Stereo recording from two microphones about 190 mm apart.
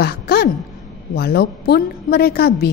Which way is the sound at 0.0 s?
55° left (ahead or behind).